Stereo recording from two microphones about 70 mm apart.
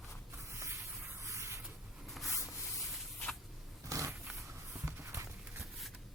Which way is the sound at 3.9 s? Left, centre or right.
Right.